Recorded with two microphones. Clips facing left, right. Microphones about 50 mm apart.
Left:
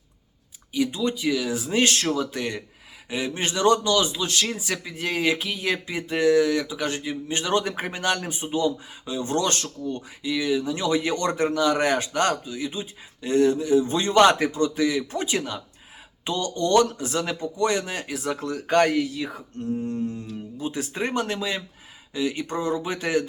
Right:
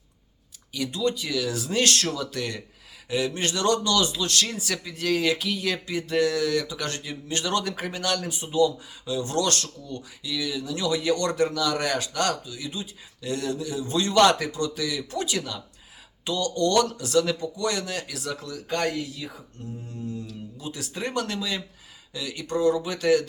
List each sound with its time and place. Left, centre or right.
0.7 s speech: centre; by 19.3 s left
19.6 s mantra: left
19.9 s speech: left